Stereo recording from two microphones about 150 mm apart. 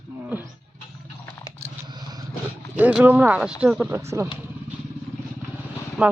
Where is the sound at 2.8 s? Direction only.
10° right (ahead or behind).